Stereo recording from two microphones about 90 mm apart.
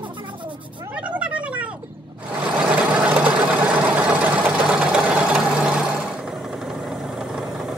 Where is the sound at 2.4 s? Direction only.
15° right (ahead or behind).